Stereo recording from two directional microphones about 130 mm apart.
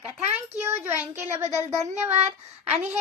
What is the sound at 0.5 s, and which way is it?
Speech, 20° right (ahead or behind).